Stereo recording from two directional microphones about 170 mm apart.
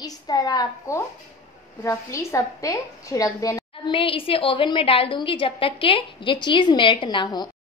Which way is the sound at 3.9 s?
30° left (ahead or behind).